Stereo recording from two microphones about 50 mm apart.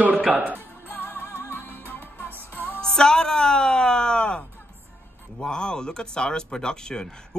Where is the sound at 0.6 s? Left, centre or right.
Left.